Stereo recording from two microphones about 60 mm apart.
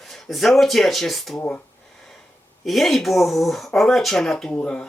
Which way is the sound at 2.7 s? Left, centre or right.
Centre.